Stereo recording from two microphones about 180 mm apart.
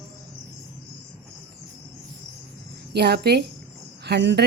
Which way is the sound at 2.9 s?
65° right (ahead or behind).